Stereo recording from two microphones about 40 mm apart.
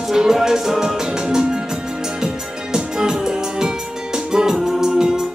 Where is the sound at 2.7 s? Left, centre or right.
Centre.